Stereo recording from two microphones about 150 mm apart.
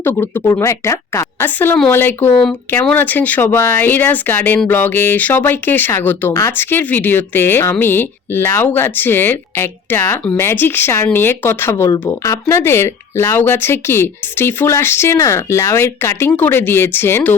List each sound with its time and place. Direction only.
0.0 s speech: 15° left (ahead or behind)